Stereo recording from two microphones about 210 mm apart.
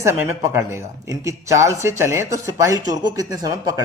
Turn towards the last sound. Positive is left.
turn(degrees=-15)  # may be behind; listen again after turning